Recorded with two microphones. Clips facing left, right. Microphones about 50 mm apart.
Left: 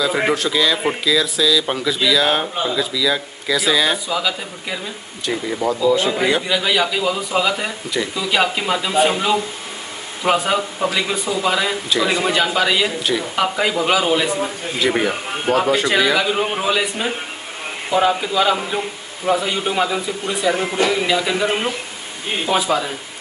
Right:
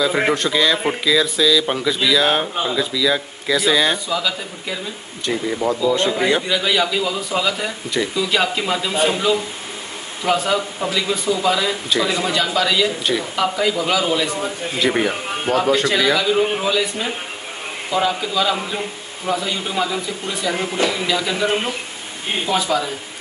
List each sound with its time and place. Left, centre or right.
0.0 s a man's voice: centre
9.1 s a man's voice: left
14.8 s a man's voice: centre
16.2 s a man's voice: left
22.5 s speech: centre